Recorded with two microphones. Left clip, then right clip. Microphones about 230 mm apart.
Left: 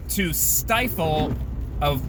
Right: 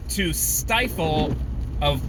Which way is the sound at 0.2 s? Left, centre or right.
Centre.